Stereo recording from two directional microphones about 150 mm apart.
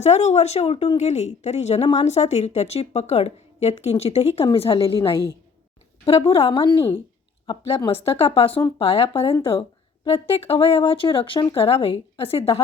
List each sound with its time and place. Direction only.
0.0 s speech: 45° left (ahead or behind)
6.1 s speech: 40° left (ahead or behind)